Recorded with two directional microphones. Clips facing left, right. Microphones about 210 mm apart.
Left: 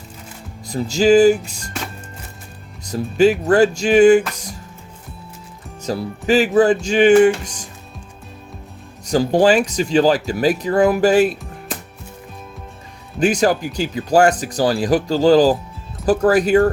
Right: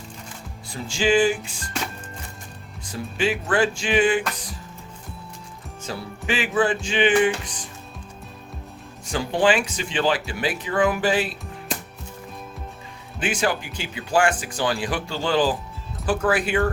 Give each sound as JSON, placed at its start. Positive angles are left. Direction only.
{"t": 0.7, "sound": "speech", "side_deg": 40}
{"t": 2.8, "sound": "speech", "side_deg": 40}
{"t": 5.8, "sound": "speech", "side_deg": 40}
{"t": 9.0, "sound": "speech", "side_deg": 40}
{"t": 13.1, "sound": "speech", "side_deg": 40}